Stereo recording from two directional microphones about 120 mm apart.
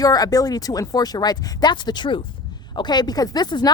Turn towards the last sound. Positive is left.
turn(degrees=35)  # may be behind; listen again after turning